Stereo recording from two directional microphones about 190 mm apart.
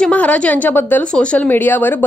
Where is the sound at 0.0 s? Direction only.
5° left (ahead or behind).